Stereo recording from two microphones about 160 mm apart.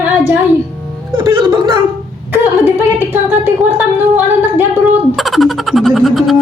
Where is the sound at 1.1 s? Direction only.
30° right (ahead or behind).